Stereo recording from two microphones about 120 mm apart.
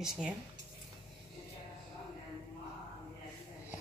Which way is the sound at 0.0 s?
5° right (ahead or behind).